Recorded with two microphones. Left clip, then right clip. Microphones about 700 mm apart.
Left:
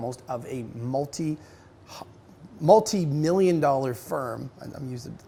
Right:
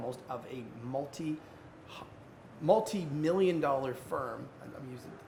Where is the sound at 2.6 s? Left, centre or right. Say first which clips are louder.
Left 10 dB; left.